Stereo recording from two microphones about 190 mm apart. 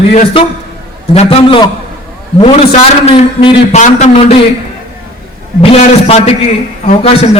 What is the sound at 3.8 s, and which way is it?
Speech, 35° left (ahead or behind).